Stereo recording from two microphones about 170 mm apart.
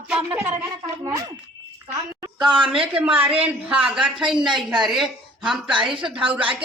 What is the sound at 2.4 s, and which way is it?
A woman's voice, 5° right (ahead or behind).